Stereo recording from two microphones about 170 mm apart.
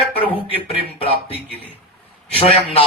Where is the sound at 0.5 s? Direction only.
35° left (ahead or behind).